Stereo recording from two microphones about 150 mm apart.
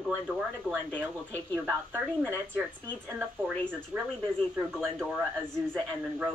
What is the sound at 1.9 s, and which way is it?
Speech, 15° right (ahead or behind).